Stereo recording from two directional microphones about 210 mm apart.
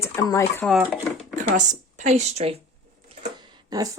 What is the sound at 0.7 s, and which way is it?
Speech, centre (ahead or behind).